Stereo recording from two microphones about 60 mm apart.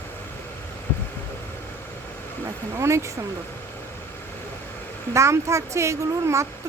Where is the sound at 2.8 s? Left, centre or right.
Right.